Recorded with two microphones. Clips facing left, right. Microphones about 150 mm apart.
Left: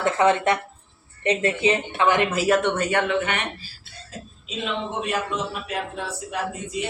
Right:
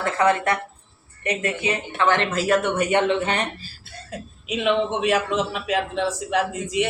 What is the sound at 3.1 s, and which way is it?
Speech, 30° right (ahead or behind).